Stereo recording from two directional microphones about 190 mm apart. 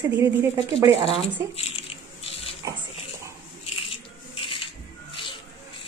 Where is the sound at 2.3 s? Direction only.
30° left (ahead or behind).